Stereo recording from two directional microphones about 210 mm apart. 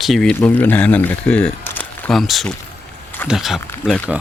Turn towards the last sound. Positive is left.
turn(degrees=5)  # may be behind; listen again after turning